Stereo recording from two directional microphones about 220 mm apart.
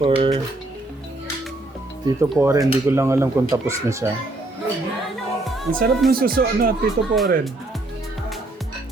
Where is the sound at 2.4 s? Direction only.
10° right (ahead or behind).